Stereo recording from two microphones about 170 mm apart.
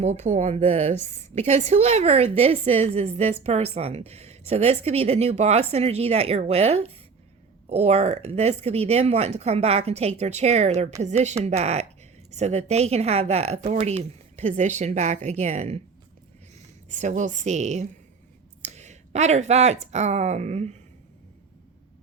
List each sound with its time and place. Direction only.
0.0 s a woman's voice: 40° right (ahead or behind)
16.9 s a woman's voice: 45° right (ahead or behind)